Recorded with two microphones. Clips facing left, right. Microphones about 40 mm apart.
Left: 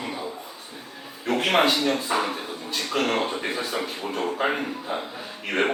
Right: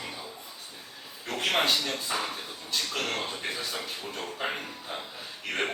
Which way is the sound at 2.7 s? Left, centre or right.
Left.